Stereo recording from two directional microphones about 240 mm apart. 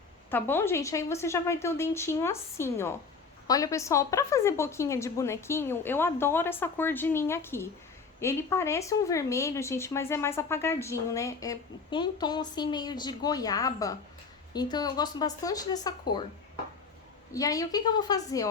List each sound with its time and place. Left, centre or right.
0.3 s speech: centre
17.3 s speech: centre